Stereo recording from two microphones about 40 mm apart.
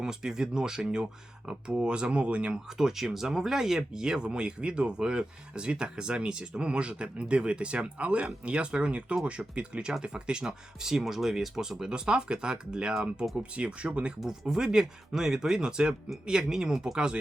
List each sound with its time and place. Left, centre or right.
0.0 s speech: centre
2.7 s speech: centre; by 14.1 s right
14.3 s speech: centre